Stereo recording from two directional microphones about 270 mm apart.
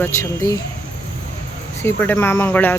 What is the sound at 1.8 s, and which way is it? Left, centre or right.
Speech, centre.